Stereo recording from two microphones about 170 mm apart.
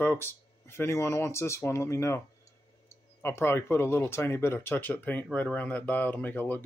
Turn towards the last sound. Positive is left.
turn(degrees=10)  # may be behind; listen again after turning